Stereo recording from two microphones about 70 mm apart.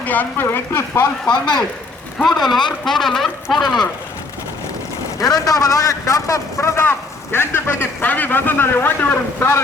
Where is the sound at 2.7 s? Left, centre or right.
Centre.